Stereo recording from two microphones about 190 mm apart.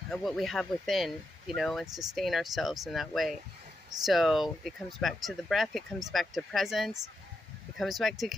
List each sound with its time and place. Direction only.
0.1 s speech: centre (ahead or behind)
8.0 s speech: centre (ahead or behind)